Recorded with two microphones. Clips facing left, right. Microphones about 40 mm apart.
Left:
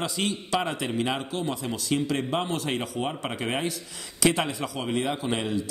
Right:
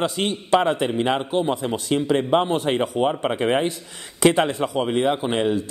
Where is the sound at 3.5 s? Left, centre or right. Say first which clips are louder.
Right 8 dB; right.